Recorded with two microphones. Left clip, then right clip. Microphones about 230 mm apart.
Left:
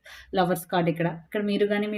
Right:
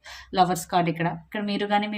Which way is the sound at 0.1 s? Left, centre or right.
Right.